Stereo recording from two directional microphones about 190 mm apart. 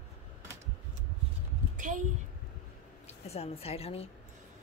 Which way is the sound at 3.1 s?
35° left (ahead or behind).